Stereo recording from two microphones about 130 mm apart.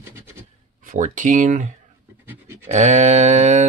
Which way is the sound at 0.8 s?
85° right.